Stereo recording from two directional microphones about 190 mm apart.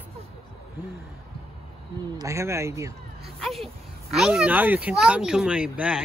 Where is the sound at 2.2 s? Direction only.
15° right (ahead or behind).